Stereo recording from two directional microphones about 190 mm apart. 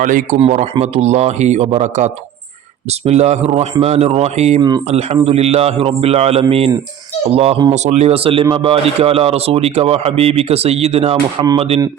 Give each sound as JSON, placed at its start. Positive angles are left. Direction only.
{"t": 0.0, "sound": "a man's voice", "side_deg": -45}
{"t": 0.3, "sound": "a man's voice", "side_deg": -35}